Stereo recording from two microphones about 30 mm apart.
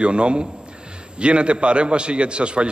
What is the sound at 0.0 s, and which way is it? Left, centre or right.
A man's voice, right.